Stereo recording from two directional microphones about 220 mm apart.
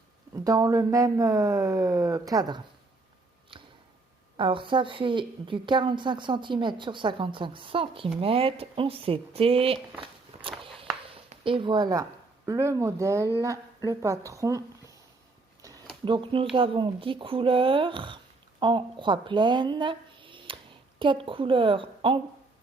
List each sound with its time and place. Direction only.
0.3 s speech: 15° right (ahead or behind)
3.5 s a sound: 25° right (ahead or behind)
4.4 s a woman's voice: 25° right (ahead or behind)
10.6 s a sound: 25° right (ahead or behind)
12.5 s speech: 15° right (ahead or behind)
16.0 s a woman's voice: 20° right (ahead or behind)